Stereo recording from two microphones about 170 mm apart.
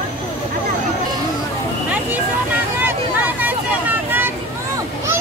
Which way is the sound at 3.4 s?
10° right (ahead or behind).